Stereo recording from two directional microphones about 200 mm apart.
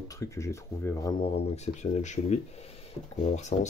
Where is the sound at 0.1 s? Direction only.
15° left (ahead or behind).